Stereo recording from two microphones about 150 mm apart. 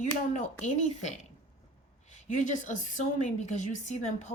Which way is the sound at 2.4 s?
55° left (ahead or behind).